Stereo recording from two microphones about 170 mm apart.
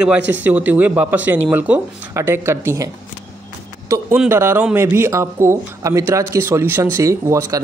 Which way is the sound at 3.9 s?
10° right (ahead or behind).